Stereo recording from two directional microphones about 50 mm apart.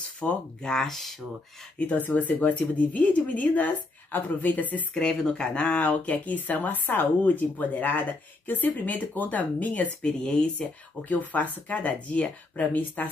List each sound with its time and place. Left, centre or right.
0.2 s speech: left
1.8 s speech: left
4.9 s speech: centre; by 9.9 s left
10.0 s speech: centre
11.1 s speech: left